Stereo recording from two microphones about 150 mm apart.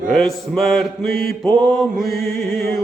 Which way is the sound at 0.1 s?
Centre (ahead or behind).